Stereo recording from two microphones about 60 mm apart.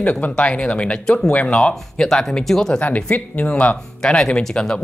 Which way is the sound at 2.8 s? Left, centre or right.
Left.